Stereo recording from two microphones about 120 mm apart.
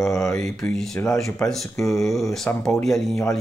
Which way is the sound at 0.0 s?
25° left (ahead or behind).